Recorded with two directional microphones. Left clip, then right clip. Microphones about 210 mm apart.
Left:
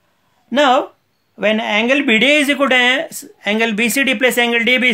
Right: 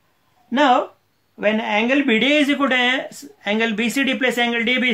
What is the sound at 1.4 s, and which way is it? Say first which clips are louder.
Speech: left 3 dB; 40° left (ahead or behind).